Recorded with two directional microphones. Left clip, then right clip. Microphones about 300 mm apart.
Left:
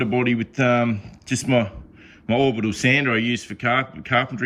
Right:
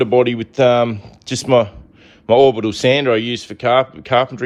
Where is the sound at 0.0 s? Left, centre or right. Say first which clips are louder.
Right 8 dB; centre.